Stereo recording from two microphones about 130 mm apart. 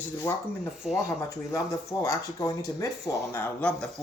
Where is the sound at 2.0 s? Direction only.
25° left (ahead or behind); by 3.9 s 10° left (ahead or behind).